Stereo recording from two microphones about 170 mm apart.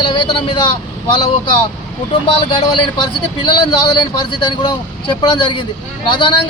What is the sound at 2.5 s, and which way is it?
A man's voice, 30° left (ahead or behind).